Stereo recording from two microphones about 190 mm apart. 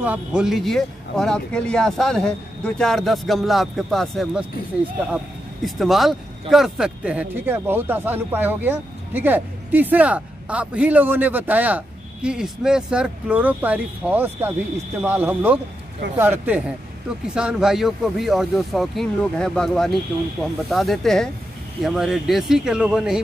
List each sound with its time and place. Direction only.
0.0 s speech: 5° right (ahead or behind)
5.8 s speech: centre (ahead or behind)